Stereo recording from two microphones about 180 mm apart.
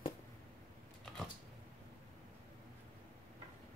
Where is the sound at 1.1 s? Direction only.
5° left (ahead or behind).